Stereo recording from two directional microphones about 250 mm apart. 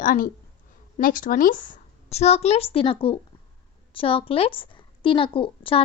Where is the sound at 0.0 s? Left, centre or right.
Left.